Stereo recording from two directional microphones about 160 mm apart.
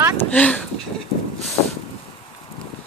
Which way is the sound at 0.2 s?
10° left (ahead or behind).